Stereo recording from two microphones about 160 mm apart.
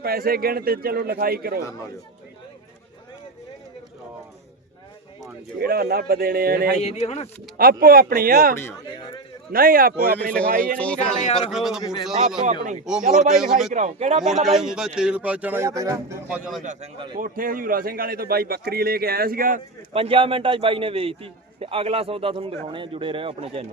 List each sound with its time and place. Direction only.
0.0 s a man's voice: 70° right (ahead or behind)
5.5 s a man's voice: 75° right (ahead or behind)
6.8 s speech: 45° left (ahead or behind)
7.5 s speech: 65° right (ahead or behind)
9.0 s a man's voice: 30° left (ahead or behind)
9.5 s speech: 65° right (ahead or behind)
10.8 s speech: 10° left (ahead or behind)
11.5 s speech: 5° right (ahead or behind)
13.7 s speech: 45° right (ahead or behind)
14.4 s speech: centre (ahead or behind); by 16.1 s 20° right (ahead or behind)
17.2 s a man's voice: 60° right (ahead or behind)
19.9 s a man's voice: 35° right (ahead or behind)